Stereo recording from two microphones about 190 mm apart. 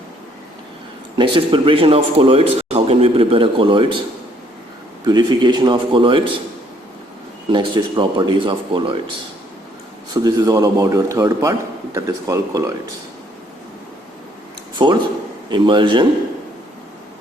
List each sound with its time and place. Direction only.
1.1 s a man's voice: 25° right (ahead or behind)
5.0 s a man's voice: 25° right (ahead or behind)
7.5 s a man's voice: 25° right (ahead or behind)
10.2 s a man's voice: 20° right (ahead or behind)
14.8 s a man's voice: 25° right (ahead or behind)